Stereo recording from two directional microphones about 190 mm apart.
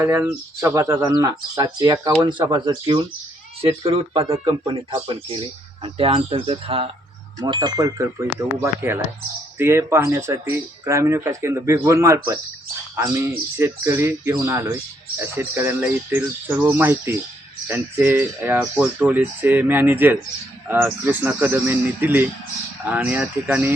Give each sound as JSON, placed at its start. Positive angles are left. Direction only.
{"t": 0.0, "sound": "speech", "side_deg": -15}